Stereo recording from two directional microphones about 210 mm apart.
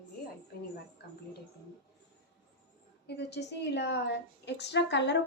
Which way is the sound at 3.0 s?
55° left (ahead or behind).